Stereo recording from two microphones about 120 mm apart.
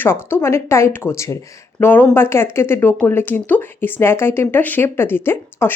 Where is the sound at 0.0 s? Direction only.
20° left (ahead or behind).